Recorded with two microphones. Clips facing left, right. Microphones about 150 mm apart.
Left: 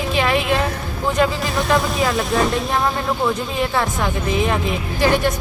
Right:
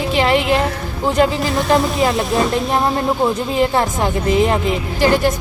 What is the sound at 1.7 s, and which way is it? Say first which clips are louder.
Speech: right 3 dB; 25° right (ahead or behind).